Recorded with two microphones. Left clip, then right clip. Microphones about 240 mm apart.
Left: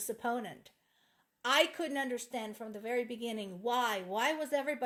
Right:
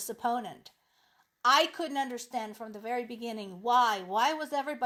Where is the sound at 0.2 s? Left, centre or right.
Right.